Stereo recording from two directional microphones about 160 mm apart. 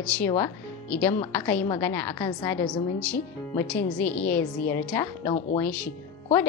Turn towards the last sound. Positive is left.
turn(degrees=10)  # may be behind; listen again after turning